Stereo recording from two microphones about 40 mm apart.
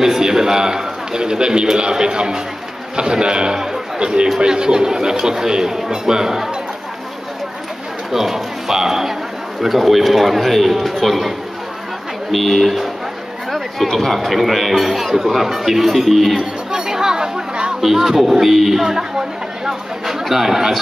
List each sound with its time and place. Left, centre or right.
0.0 s a man's voice: centre
8.1 s a man's voice: centre
16.7 s chatter: centre
17.7 s speech: centre